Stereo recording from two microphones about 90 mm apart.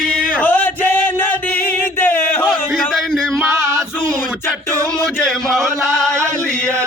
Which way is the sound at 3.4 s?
35° right (ahead or behind).